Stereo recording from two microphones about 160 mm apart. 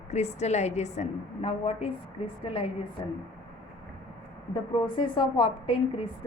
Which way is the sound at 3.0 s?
35° left (ahead or behind).